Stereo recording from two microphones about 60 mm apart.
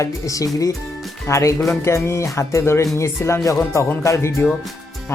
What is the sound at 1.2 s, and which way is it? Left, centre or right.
Speech, left.